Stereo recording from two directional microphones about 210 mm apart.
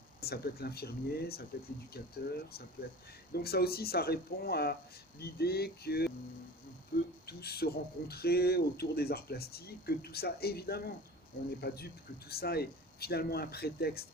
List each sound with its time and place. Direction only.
0.2 s speech: 50° left (ahead or behind)